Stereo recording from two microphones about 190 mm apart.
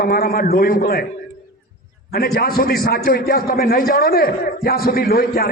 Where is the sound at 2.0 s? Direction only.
55° left (ahead or behind).